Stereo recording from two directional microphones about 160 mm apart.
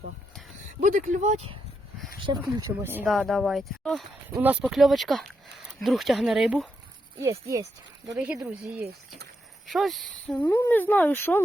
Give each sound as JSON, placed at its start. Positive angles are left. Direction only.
{"t": 0.8, "sound": "speech", "side_deg": -50}
{"t": 2.2, "sound": "speech", "side_deg": -25}
{"t": 3.1, "sound": "speech", "side_deg": 0}
{"t": 7.2, "sound": "speech", "side_deg": -20}
{"t": 9.6, "sound": "speech", "side_deg": 0}